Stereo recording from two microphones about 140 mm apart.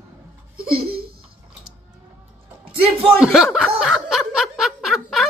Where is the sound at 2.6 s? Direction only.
40° right (ahead or behind).